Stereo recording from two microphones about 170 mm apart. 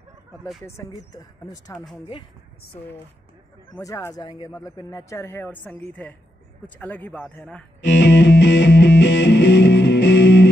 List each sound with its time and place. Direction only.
0.7 s speech: 20° left (ahead or behind)
3.8 s speech: 20° left (ahead or behind)
7.8 s music: 90° left